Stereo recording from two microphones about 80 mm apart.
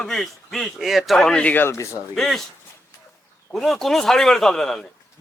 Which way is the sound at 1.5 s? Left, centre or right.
Left.